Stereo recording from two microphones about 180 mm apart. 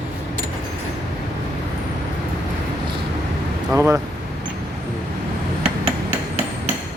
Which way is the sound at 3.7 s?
15° right (ahead or behind).